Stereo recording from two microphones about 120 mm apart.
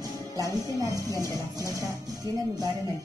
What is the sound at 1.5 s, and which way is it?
Speech, 30° right (ahead or behind).